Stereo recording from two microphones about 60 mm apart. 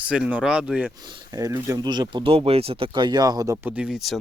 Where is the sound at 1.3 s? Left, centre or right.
Right.